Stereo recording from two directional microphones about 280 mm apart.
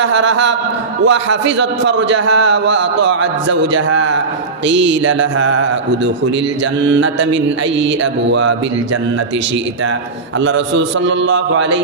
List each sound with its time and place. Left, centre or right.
0.0 s a man's voice: right
6.8 s a man's voice: right
10.4 s a man's voice: right